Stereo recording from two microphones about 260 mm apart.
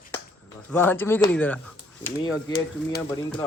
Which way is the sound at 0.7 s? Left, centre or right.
Centre.